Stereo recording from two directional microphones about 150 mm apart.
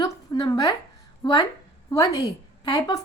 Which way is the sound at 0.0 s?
25° left (ahead or behind).